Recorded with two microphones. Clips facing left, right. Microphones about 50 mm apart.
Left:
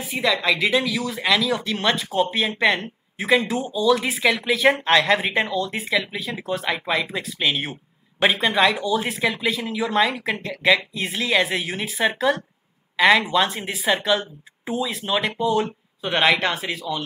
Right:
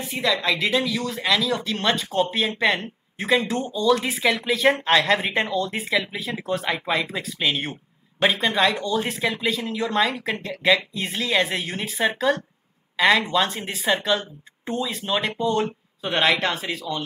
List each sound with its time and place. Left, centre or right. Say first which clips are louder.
0.0 s speech: left 1 dB; centre